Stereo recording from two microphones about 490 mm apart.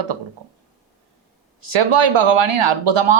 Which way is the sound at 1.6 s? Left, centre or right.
Right.